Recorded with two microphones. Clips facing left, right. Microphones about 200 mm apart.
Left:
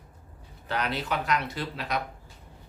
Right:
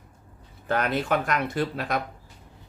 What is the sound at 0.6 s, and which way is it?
Speech, 50° right (ahead or behind).